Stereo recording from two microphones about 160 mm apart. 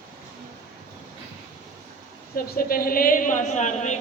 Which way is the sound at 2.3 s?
65° left (ahead or behind).